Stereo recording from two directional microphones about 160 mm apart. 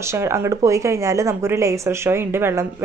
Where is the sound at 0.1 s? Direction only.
15° right (ahead or behind).